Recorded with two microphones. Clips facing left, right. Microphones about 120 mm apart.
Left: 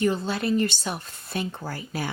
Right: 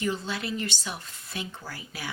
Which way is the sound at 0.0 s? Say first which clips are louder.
Left 6 dB; 45° left (ahead or behind).